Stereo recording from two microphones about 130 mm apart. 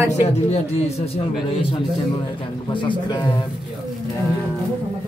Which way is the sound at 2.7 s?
40° left (ahead or behind).